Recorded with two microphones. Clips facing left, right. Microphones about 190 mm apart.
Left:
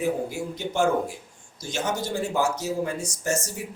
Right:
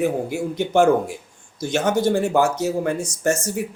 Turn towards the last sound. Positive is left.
turn(degrees=-60)  # may be behind; listen again after turning